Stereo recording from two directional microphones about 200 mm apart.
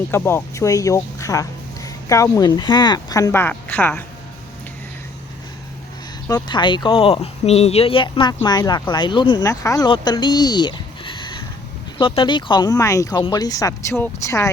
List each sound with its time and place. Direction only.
0.1 s speech: 10° left (ahead or behind)
6.2 s speech: 20° left (ahead or behind)